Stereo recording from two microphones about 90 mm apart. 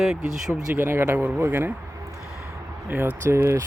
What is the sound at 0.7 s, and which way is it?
Speech, 25° right (ahead or behind).